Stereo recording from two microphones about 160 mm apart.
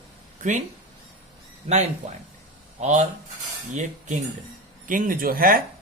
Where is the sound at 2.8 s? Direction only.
50° right (ahead or behind).